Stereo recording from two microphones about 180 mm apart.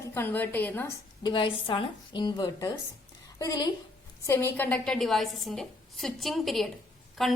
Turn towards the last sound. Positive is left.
turn(degrees=0)  # may be behind; listen again after turning